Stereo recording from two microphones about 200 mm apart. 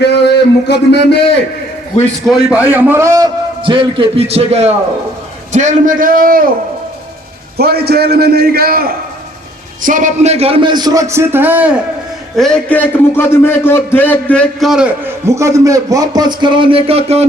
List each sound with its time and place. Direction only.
0.0 s a sound: 55° left (ahead or behind)
2.6 s a man's voice: 10° right (ahead or behind); by 6.5 s 45° right (ahead or behind)
7.5 s a man's voice: 50° right (ahead or behind); by 11.8 s 10° right (ahead or behind)
12.4 s a man's voice: 5° left (ahead or behind); by 17.2 s 30° right (ahead or behind)